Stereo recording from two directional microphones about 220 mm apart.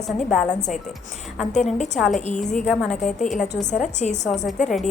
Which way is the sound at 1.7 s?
30° left (ahead or behind).